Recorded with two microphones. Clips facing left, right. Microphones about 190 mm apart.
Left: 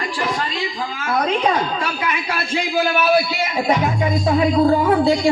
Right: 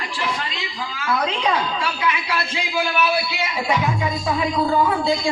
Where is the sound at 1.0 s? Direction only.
50° left (ahead or behind).